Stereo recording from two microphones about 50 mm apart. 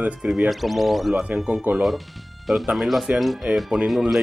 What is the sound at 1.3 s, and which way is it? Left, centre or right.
Speech, centre.